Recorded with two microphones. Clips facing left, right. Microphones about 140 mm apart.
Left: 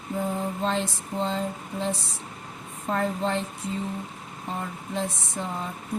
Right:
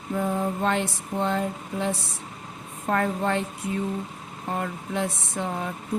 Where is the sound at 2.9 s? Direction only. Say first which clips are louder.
Right 2 dB; 65° right (ahead or behind).